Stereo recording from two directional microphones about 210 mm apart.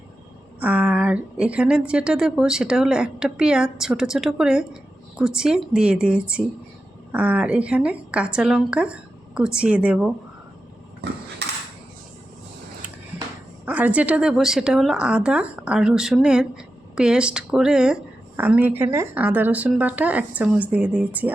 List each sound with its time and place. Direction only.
0.6 s a woman's voice: 5° right (ahead or behind)
11.4 s dishes: 55° right (ahead or behind)
13.7 s a woman's voice: 5° right (ahead or behind)